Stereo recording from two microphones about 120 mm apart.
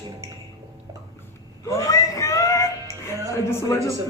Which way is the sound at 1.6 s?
25° left (ahead or behind).